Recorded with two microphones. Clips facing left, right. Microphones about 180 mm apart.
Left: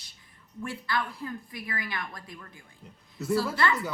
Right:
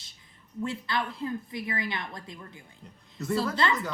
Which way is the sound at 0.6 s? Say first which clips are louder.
Right 1 dB; 20° right (ahead or behind).